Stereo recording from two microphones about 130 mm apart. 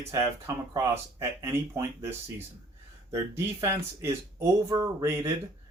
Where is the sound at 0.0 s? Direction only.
20° right (ahead or behind).